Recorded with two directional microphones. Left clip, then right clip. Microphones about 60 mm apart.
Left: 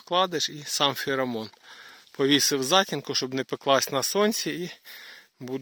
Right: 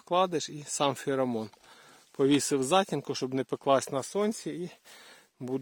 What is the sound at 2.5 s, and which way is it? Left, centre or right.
Speech, centre.